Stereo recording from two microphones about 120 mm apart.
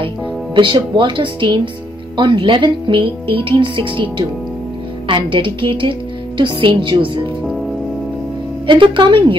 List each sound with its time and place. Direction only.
0.6 s a woman's voice: 40° right (ahead or behind)
8.6 s a woman's voice: 40° right (ahead or behind)